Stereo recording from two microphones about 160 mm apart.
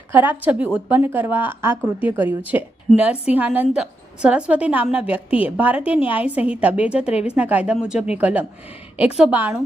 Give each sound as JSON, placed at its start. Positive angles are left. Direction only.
{"t": 0.1, "sound": "a woman's voice", "side_deg": -10}